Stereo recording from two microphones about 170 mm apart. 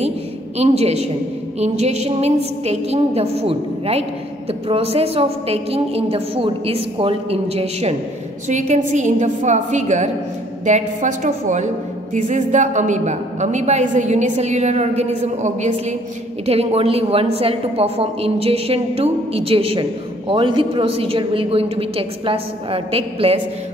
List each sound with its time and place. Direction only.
0.6 s a woman's voice: 35° right (ahead or behind)